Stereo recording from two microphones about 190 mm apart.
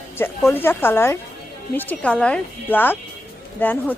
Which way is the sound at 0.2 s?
10° left (ahead or behind).